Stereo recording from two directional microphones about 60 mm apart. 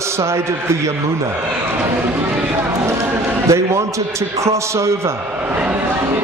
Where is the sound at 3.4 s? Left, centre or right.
Right.